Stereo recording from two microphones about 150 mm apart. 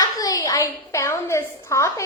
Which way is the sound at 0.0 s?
25° left (ahead or behind).